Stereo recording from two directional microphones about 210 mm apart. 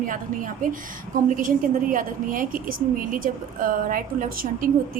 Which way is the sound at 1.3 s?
40° right (ahead or behind).